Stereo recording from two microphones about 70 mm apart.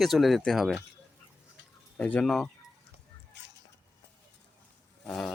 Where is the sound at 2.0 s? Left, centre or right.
Left.